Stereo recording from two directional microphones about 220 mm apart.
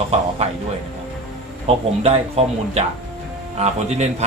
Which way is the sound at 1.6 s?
30° right (ahead or behind).